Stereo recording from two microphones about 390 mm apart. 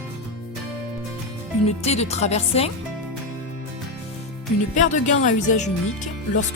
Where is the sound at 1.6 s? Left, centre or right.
Centre.